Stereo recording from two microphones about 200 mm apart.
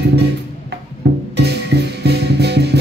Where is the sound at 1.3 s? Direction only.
55° right (ahead or behind).